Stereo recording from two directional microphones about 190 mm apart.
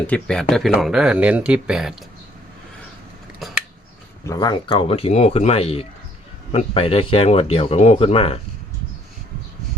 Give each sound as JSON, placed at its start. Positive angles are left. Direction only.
{"t": 0.1, "sound": "speech", "side_deg": 5}
{"t": 4.3, "sound": "speech", "side_deg": 20}